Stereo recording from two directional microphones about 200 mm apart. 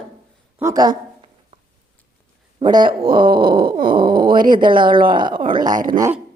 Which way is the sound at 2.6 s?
25° right (ahead or behind).